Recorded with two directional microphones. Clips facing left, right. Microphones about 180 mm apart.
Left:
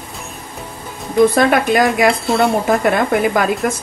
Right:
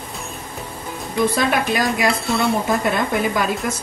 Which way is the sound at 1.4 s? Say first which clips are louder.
Left 6 dB; 55° left (ahead or behind).